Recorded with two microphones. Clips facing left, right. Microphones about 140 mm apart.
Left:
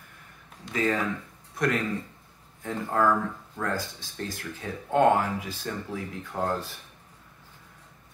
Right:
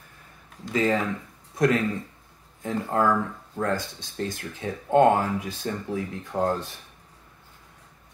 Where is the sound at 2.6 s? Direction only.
20° right (ahead or behind).